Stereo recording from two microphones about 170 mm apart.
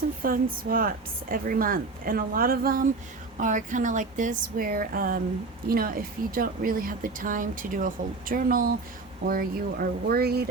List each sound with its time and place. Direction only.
0.2 s a woman's voice: 55° right (ahead or behind)